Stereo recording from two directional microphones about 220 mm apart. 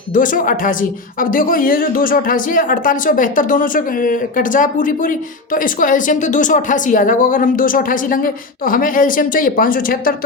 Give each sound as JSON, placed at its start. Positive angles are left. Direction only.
{"t": 0.1, "sound": "speech", "side_deg": 35}